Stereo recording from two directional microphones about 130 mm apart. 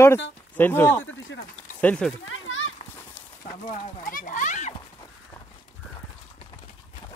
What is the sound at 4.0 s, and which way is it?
Children playing, 90° left.